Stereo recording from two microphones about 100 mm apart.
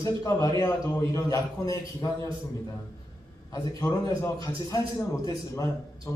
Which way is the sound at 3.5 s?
35° left (ahead or behind).